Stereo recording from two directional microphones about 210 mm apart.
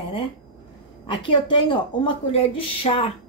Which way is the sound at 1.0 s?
25° left (ahead or behind).